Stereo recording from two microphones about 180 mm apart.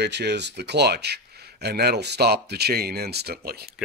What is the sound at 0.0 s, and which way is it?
Speech, 70° right (ahead or behind).